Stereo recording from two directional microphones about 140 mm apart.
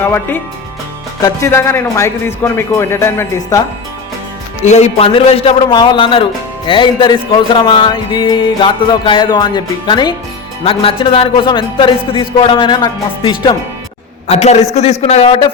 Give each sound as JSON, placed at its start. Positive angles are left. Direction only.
{"t": 0.0, "sound": "a man's voice", "side_deg": 15}
{"t": 4.6, "sound": "music", "side_deg": 50}
{"t": 14.3, "sound": "a man's voice", "side_deg": 50}